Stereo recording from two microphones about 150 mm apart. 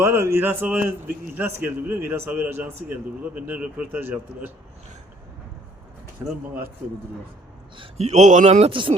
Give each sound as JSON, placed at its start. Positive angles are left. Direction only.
{"t": 0.0, "sound": "a man's voice", "side_deg": -15}
{"t": 6.2, "sound": "a man's voice", "side_deg": -10}
{"t": 7.8, "sound": "speech", "side_deg": -45}
{"t": 8.7, "sound": "speech", "side_deg": -35}